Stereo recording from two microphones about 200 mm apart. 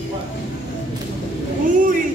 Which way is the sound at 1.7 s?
40° right (ahead or behind).